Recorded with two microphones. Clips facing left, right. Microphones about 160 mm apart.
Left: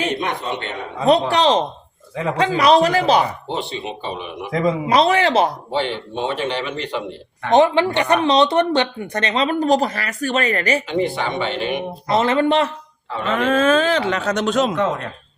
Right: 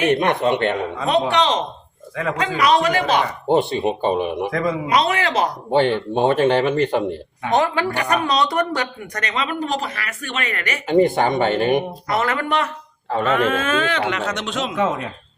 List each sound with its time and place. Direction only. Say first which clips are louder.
0.1 s speech: right 6 dB; 60° right (ahead or behind)
1.3 s speech: left 3 dB; 35° left (ahead or behind)
3.4 s speech: right 8 dB; 50° right (ahead or behind)
4.5 s speech: left 5 dB; 25° left (ahead or behind)
5.7 s speech: right 6 dB; 50° right (ahead or behind)
7.5 s speech: left 5 dB; 25° left (ahead or behind)
10.8 s speech: right 5 dB; 45° right (ahead or behind)
12.0 s speech: left 5 dB; 25° left (ahead or behind)
13.1 s speech: right 3 dB; 45° right (ahead or behind)
13.5 s speech: left 5 dB; 35° left (ahead or behind)
14.8 s speech: even; 5° right (ahead or behind)